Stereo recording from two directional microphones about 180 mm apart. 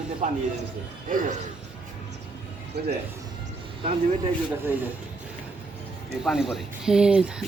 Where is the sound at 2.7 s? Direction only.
65° right (ahead or behind).